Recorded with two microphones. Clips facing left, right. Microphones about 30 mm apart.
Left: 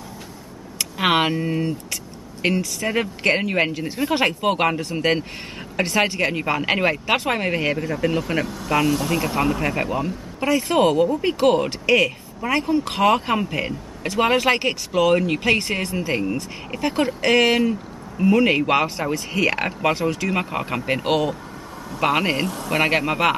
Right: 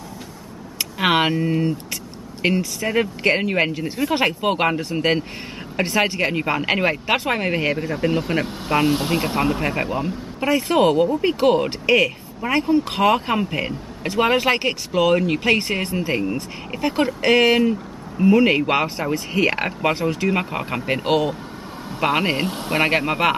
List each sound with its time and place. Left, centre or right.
0.7 s speech: centre
7.9 s speech: centre
8.5 s speech: right
9.4 s speech: centre
20.3 s speech: centre